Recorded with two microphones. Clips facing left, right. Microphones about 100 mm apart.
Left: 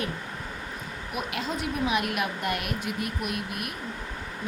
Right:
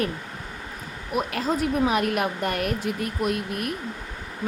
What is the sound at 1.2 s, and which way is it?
A woman's voice, 40° right (ahead or behind).